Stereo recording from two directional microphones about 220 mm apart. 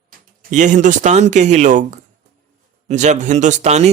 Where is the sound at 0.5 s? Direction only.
35° right (ahead or behind).